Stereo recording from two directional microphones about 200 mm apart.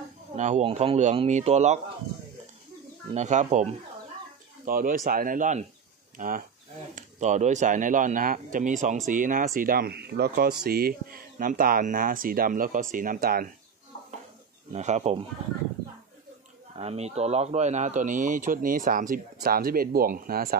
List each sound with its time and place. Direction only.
0.4 s speech: 35° right (ahead or behind)
3.2 s speech: 35° right (ahead or behind)
14.7 s speech: 35° right (ahead or behind)
16.7 s speech: 30° right (ahead or behind); by 20.5 s 45° right (ahead or behind)